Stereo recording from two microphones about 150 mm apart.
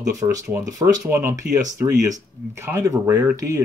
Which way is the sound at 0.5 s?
15° right (ahead or behind).